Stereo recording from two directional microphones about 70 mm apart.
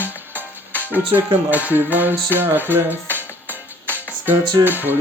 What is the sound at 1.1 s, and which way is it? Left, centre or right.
Music, right.